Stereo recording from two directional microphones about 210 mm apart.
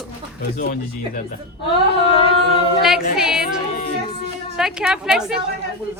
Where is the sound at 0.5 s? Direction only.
40° left (ahead or behind).